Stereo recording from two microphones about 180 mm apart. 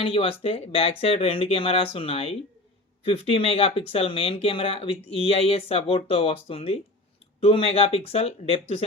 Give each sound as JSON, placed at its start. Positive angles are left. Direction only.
{"t": 0.0, "sound": "speech", "side_deg": 30}